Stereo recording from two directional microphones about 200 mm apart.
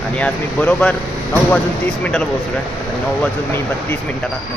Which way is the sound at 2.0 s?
5° left (ahead or behind).